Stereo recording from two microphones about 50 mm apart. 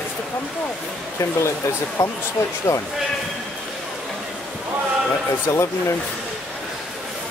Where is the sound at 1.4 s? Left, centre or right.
Left.